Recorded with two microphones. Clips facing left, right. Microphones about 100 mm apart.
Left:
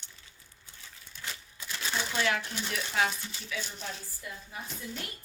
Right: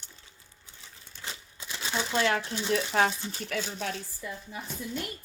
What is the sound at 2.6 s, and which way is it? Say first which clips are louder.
A woman's voice: right 7 dB; 30° right (ahead or behind).